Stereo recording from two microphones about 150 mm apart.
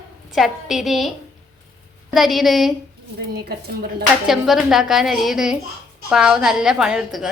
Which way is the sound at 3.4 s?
90° right.